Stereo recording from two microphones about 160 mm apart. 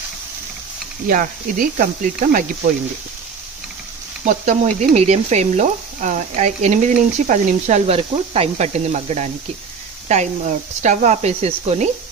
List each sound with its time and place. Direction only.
1.0 s speech: 60° right (ahead or behind)
4.2 s speech: 50° right (ahead or behind)